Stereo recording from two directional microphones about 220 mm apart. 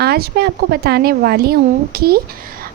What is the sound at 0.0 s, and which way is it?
Speech, 45° right (ahead or behind).